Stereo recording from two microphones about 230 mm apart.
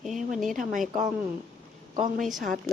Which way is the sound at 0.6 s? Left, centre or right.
Right.